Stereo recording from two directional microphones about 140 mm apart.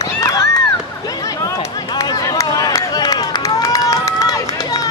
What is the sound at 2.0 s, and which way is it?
Run, 25° left (ahead or behind).